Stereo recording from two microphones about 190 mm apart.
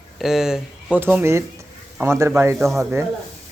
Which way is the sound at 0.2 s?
Centre (ahead or behind).